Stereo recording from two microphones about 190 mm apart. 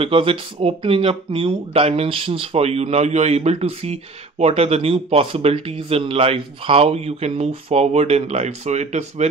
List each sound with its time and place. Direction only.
0.0 s speech: 30° right (ahead or behind)